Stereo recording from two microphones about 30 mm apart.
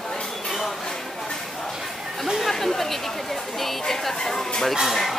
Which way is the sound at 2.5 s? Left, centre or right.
Centre.